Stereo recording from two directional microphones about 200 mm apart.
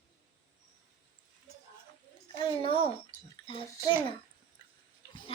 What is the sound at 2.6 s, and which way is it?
Speech, 30° left (ahead or behind).